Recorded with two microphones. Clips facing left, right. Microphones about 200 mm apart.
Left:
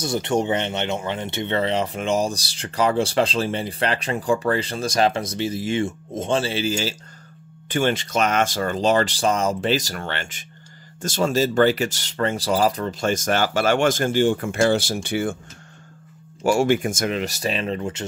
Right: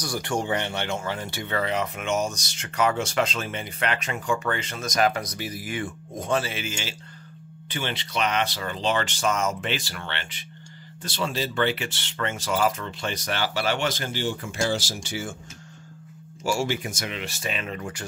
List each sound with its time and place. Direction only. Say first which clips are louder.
0.0 s speech: left 6 dB; 20° left (ahead or behind)
7.7 s speech: left 9 dB; 45° left (ahead or behind)
16.4 s speech: left 8 dB; 55° left (ahead or behind); by 18.0 s 25° left (ahead or behind)